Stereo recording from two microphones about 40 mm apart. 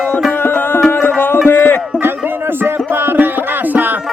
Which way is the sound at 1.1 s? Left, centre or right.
Left.